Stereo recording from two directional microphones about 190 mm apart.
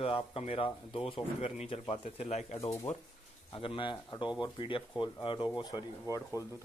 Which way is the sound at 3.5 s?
25° left (ahead or behind).